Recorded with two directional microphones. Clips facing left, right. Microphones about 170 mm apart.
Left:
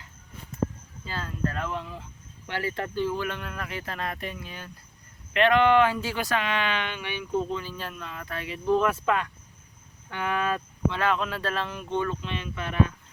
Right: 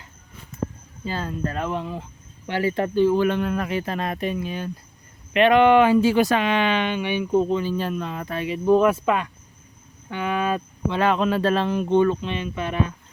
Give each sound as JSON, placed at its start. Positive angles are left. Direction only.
{"t": 1.0, "sound": "speech", "side_deg": -20}